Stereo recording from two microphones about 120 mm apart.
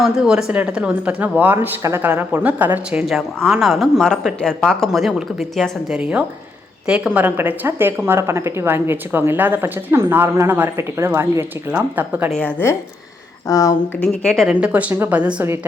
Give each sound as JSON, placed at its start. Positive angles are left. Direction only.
{"t": 0.0, "sound": "a woman's voice", "side_deg": -5}
{"t": 3.1, "sound": "a woman's voice", "side_deg": 0}
{"t": 12.6, "sound": "speech", "side_deg": 20}
{"t": 14.0, "sound": "speech", "side_deg": 5}
{"t": 14.5, "sound": "a woman's voice", "side_deg": -10}